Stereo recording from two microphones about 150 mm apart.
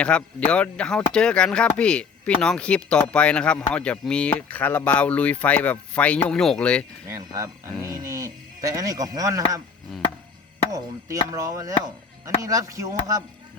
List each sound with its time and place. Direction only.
0.0 s speech: 5° left (ahead or behind)
7.3 s speech: 20° right (ahead or behind)
10.7 s speech: 25° right (ahead or behind)